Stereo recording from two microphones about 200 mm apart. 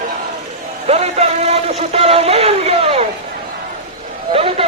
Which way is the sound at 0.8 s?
30° right (ahead or behind).